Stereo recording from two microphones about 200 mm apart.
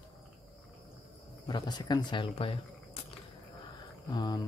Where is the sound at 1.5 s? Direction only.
20° left (ahead or behind).